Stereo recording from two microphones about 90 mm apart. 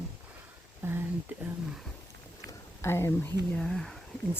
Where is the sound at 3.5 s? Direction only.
5° left (ahead or behind).